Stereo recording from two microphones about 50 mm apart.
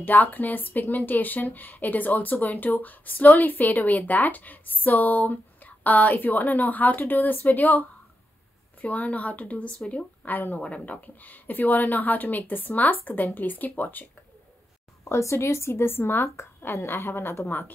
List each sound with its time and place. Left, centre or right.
0.0 s speech: left
8.8 s speech: left
15.0 s speech: left
17.5 s speech: left